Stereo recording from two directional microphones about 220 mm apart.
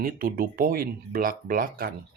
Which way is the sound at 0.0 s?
40° right (ahead or behind).